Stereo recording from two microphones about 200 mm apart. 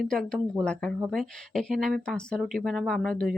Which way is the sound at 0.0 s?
5° left (ahead or behind).